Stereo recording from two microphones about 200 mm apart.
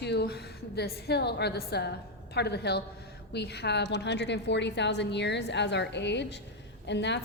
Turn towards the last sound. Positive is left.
turn(degrees=60)  # may be behind; listen again after turning